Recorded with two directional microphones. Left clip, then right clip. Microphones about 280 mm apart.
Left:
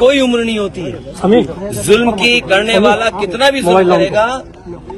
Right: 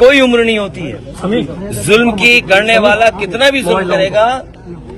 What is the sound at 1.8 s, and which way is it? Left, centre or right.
A man's voice, centre.